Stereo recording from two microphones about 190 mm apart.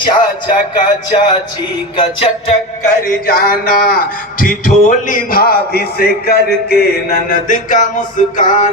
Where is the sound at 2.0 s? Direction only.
30° left (ahead or behind).